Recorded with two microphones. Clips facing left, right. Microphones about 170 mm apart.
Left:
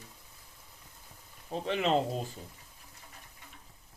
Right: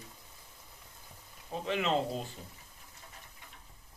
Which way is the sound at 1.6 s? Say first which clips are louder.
Left 2 dB; 35° left (ahead or behind).